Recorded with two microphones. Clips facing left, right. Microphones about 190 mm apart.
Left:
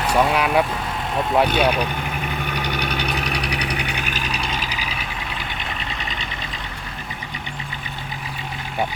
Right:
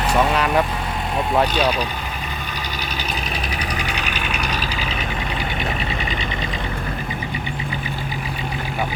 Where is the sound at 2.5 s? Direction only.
65° left (ahead or behind); by 4.5 s 35° left (ahead or behind).